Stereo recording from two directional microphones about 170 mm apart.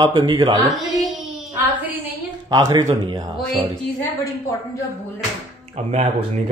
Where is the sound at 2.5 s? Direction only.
25° right (ahead or behind).